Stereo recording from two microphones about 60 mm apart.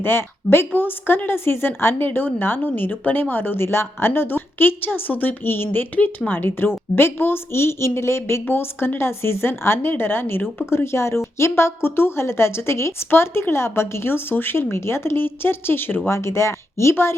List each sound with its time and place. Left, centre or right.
0.0 s a woman's voice: left
16.0 s a woman's voice: left